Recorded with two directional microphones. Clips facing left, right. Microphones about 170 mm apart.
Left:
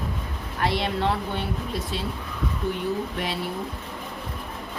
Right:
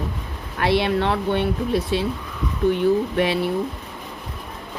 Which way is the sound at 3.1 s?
65° right (ahead or behind).